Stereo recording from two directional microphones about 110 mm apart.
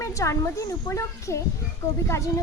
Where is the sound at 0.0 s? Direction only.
30° left (ahead or behind).